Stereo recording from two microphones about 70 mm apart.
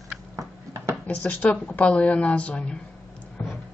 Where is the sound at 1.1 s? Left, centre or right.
Left.